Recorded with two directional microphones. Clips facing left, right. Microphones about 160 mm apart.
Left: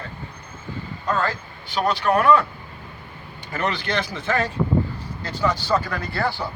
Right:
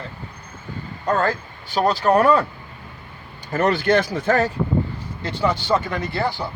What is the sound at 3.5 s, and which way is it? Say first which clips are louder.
Speech: right 7 dB; 45° right (ahead or behind).